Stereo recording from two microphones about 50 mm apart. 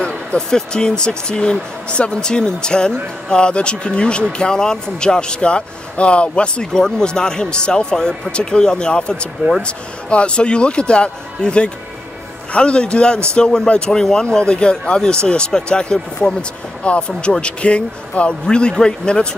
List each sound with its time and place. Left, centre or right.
0.0 s speech: centre